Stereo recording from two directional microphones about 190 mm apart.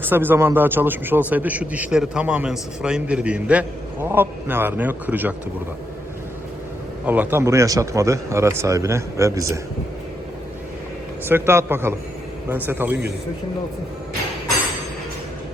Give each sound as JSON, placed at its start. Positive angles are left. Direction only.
{"t": 0.0, "sound": "a man's voice", "side_deg": -10}
{"t": 7.0, "sound": "a man's voice", "side_deg": -10}
{"t": 11.3, "sound": "a man's voice", "side_deg": -10}